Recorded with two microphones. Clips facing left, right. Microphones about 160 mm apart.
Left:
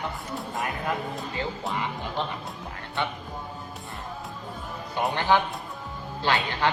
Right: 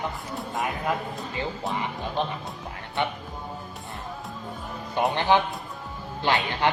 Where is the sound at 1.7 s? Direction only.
20° right (ahead or behind).